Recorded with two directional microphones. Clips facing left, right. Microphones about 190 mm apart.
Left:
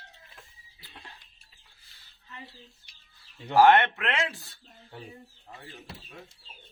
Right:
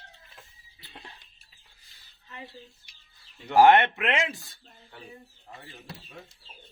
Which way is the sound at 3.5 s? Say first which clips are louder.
Right 1 dB; 15° right (ahead or behind).